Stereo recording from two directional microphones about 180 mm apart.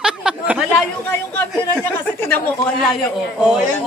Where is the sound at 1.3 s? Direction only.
10° left (ahead or behind).